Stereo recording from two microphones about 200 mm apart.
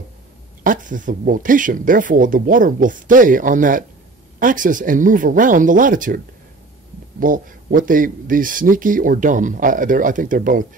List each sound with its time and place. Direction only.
0.7 s speech: 40° right (ahead or behind)